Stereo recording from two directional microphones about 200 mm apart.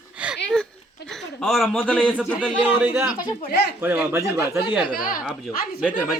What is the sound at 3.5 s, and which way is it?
Speech, 55° left (ahead or behind).